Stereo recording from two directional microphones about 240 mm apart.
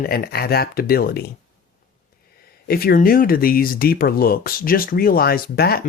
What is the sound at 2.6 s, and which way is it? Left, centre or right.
Speech, left.